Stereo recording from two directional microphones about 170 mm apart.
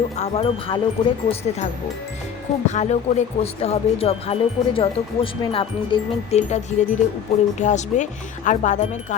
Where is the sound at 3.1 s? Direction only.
45° left (ahead or behind).